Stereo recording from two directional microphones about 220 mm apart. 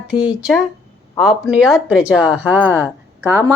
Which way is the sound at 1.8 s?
5° right (ahead or behind).